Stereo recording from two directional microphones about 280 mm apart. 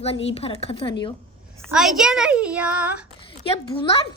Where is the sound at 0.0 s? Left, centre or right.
Left.